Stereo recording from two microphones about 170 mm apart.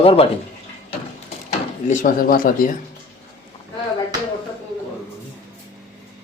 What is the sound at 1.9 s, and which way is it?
Speech, 50° left (ahead or behind).